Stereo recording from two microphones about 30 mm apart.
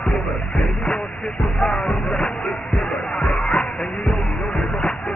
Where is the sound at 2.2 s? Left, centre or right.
Left.